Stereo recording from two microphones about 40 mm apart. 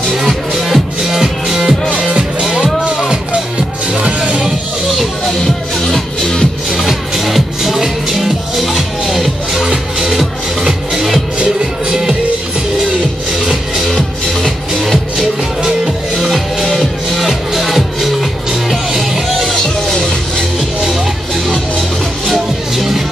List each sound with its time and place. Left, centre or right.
0.6 s music: centre
2.5 s music: right
3.9 s music: right
5.9 s music: centre
6.8 s music: centre
11.9 s music: centre
13.9 s music: centre
14.8 s music: centre
19.5 s music: centre
22.2 s music: centre